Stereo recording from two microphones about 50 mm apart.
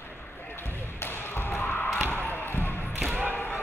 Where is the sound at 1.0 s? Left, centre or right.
Left.